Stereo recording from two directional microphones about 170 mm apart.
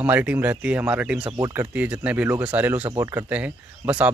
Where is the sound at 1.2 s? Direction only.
25° right (ahead or behind).